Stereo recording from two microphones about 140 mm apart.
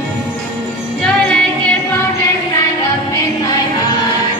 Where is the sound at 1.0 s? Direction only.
10° left (ahead or behind).